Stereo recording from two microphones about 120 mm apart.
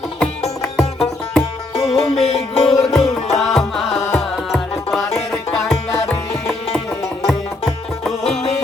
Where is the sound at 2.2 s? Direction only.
60° left (ahead or behind).